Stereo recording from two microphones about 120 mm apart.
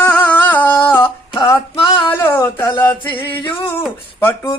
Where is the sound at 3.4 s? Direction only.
40° left (ahead or behind).